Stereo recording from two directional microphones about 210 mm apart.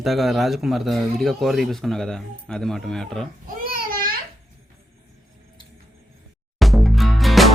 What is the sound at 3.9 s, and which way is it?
Babbling, 45° right (ahead or behind).